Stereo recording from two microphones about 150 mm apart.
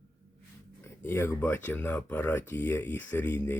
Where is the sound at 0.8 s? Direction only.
15° left (ahead or behind).